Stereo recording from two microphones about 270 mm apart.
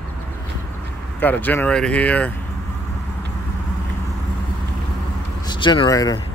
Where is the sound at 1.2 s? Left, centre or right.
Centre.